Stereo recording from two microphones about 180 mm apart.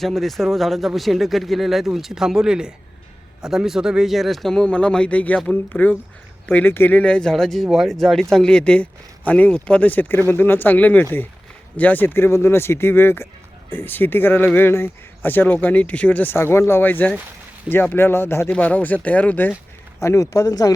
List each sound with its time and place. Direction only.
0.0 s speech: centre (ahead or behind); by 20.7 s 20° left (ahead or behind)